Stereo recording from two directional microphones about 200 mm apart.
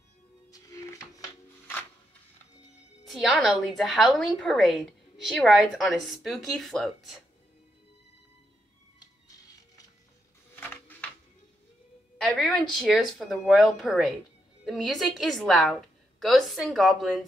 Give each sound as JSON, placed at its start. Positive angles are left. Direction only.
{"t": 0.5, "sound": "music", "side_deg": 15}
{"t": 3.1, "sound": "a woman's voice", "side_deg": 0}
{"t": 10.5, "sound": "a sound", "side_deg": 10}
{"t": 12.2, "sound": "a woman's voice", "side_deg": 0}